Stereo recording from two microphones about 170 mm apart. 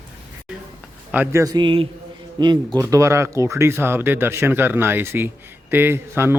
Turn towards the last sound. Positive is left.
turn(degrees=-15)  # may be behind; listen again after turning